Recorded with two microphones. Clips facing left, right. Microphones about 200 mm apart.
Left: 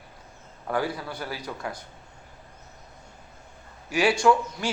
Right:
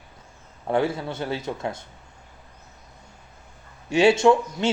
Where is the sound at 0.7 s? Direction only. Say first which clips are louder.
Right 5 dB; 25° right (ahead or behind).